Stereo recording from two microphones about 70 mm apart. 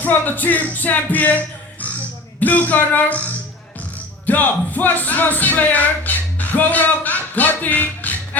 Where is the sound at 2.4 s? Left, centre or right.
Left.